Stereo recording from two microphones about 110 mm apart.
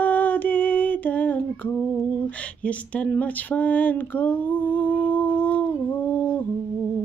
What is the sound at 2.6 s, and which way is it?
Speech, 10° left (ahead or behind).